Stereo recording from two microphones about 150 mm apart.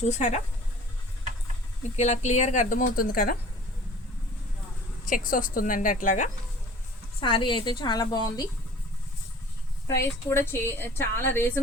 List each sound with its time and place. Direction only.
0.1 s speech: 50° left (ahead or behind)
2.0 s speech: 50° left (ahead or behind); by 3.3 s 75° left (ahead or behind)
5.0 s speech: 65° left (ahead or behind)
7.2 s a woman's voice: 30° left (ahead or behind)
9.8 s a woman's voice: 15° left (ahead or behind)